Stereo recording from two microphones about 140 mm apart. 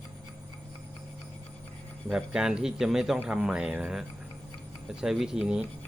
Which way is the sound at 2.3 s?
5° right (ahead or behind).